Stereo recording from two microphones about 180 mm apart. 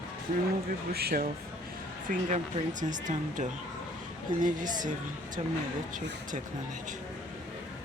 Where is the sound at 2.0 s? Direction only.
45° right (ahead or behind).